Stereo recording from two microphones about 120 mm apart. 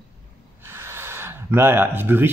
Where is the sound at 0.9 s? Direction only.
20° right (ahead or behind).